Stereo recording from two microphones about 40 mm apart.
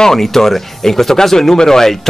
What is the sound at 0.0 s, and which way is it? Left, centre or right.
Speech, centre.